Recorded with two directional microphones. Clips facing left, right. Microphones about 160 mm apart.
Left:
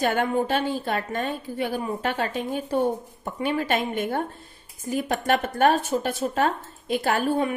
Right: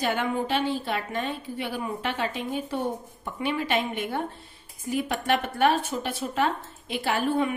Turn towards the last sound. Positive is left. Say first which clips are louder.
# left 2 dB
turn(degrees=40)  # may be behind; listen again after turning